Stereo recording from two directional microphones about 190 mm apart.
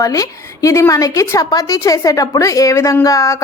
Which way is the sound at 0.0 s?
20° left (ahead or behind).